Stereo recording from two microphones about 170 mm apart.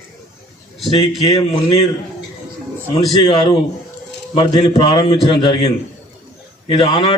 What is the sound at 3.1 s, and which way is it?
A man's voice, 30° left (ahead or behind).